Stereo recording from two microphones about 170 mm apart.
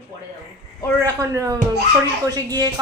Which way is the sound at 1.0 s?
20° right (ahead or behind).